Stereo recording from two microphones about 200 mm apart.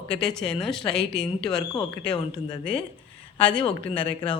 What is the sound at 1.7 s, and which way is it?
A woman's voice, 25° left (ahead or behind).